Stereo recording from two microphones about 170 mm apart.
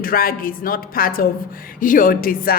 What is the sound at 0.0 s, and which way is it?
A woman's voice, 60° left (ahead or behind).